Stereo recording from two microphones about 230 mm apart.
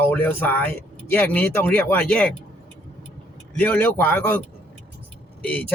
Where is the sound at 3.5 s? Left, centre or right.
Centre.